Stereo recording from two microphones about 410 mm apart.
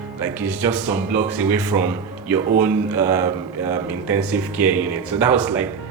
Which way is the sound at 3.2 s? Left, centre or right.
Left.